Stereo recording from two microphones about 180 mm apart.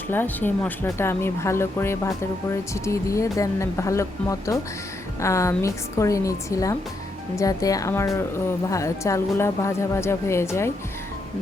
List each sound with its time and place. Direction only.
0.1 s speech: 10° left (ahead or behind)